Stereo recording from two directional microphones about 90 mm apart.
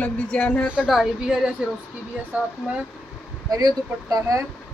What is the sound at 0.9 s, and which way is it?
Speech, 5° right (ahead or behind).